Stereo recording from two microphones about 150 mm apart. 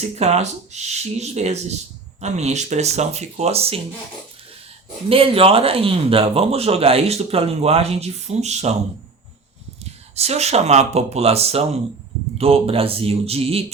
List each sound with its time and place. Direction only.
0.2 s speech: 45° right (ahead or behind)
5.0 s speech: 40° right (ahead or behind)
10.2 s speech: 45° right (ahead or behind)